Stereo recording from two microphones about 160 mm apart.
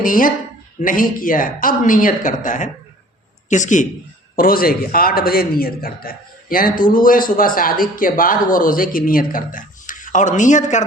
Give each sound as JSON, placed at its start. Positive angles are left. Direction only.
{"t": 0.0, "sound": "a woman's voice", "side_deg": 60}
{"t": 4.4, "sound": "a man's voice", "side_deg": 65}